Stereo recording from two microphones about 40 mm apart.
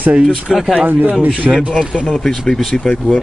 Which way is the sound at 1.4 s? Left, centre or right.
Centre.